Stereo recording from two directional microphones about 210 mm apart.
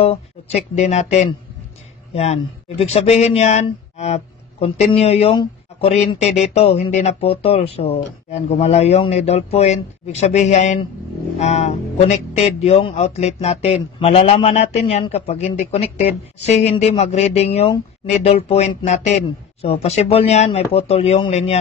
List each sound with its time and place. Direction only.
0.0 s speech: 30° left (ahead or behind)